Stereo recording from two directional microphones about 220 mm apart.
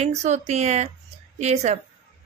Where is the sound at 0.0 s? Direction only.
30° right (ahead or behind).